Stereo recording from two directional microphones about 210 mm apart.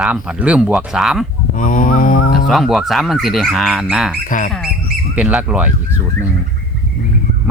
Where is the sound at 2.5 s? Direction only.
Centre (ahead or behind).